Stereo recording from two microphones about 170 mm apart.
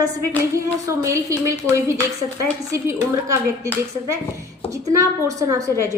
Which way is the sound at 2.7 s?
15° right (ahead or behind).